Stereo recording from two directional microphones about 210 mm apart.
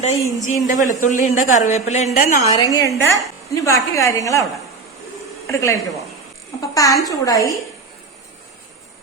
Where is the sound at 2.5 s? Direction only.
20° left (ahead or behind).